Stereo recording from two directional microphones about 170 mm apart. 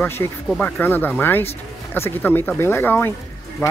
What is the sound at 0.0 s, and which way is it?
Speech, 15° left (ahead or behind).